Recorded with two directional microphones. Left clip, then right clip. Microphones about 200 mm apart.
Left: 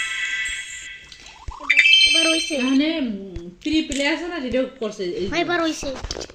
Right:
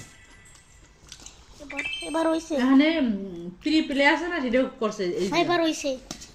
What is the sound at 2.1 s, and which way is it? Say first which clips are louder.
Bicycle bell: left 6 dB; 5° left (ahead or behind).